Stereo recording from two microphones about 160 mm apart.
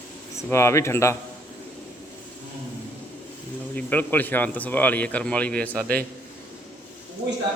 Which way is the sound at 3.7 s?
10° left (ahead or behind).